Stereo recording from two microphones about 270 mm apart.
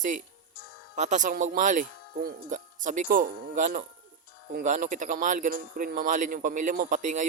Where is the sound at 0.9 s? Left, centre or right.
Right.